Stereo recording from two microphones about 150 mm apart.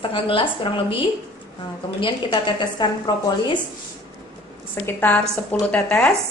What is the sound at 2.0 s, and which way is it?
A woman's voice, 30° left (ahead or behind).